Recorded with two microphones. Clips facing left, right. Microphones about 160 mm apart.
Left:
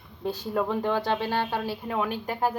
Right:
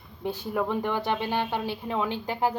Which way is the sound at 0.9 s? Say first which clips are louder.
Left 1 dB; 15° right (ahead or behind).